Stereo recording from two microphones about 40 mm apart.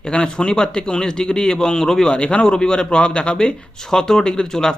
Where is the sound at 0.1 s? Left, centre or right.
Left.